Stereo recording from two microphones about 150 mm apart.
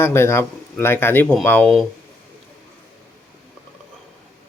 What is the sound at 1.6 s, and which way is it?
Speech, centre (ahead or behind).